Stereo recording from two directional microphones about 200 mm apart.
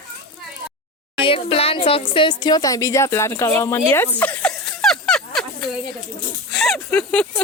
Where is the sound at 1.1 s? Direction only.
25° left (ahead or behind).